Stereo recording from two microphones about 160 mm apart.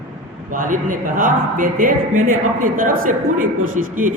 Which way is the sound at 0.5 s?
60° right (ahead or behind).